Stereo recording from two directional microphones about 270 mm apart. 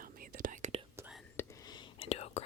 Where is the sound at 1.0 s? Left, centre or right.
Centre.